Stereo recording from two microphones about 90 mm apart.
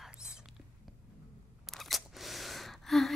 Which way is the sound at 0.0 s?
10° right (ahead or behind).